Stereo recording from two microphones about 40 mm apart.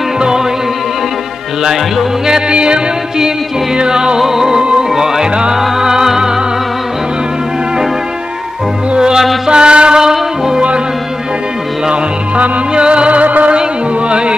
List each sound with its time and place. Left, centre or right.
0.2 s music: centre
1.6 s music: centre
2.5 s music: right
8.9 s music: right
11.9 s music: right
13.5 s music: right